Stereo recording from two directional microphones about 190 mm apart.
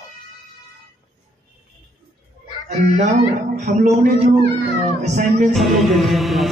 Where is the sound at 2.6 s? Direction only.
40° right (ahead or behind).